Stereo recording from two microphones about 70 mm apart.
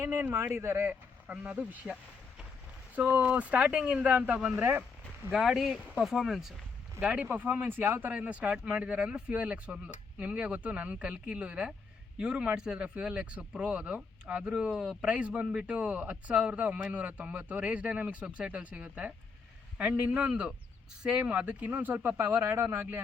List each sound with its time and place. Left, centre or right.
0.0 s speech: right
1.3 s speech: centre
4.5 s speech: right
5.3 s speech: centre
7.0 s speech: centre
8.1 s speech: centre